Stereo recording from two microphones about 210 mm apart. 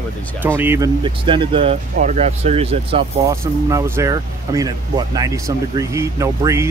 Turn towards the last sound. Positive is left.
turn(degrees=-15)  # may be behind; listen again after turning